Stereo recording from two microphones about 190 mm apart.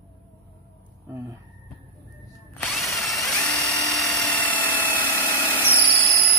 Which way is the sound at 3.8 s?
Centre (ahead or behind).